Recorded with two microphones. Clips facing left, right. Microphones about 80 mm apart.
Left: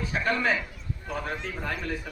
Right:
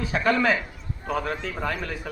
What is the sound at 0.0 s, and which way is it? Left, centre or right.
A man's voice, right.